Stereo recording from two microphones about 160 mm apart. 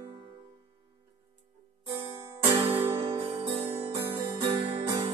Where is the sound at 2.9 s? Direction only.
35° right (ahead or behind).